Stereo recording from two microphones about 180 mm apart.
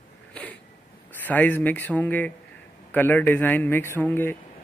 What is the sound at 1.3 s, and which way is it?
Speech, 10° left (ahead or behind).